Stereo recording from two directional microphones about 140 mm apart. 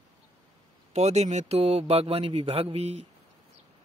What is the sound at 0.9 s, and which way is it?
A man's voice, 50° right (ahead or behind).